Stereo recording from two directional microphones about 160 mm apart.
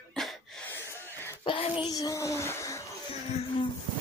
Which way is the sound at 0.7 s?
15° left (ahead or behind).